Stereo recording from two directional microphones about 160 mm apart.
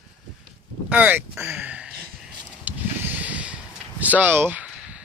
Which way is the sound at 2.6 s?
10° right (ahead or behind).